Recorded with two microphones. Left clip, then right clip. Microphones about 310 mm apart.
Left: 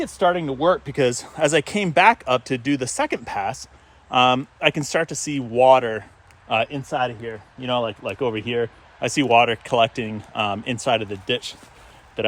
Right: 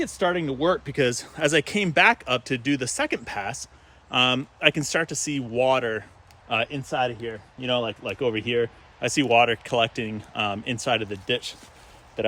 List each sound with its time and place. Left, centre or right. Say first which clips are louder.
0.0 s speech: left 4 dB; centre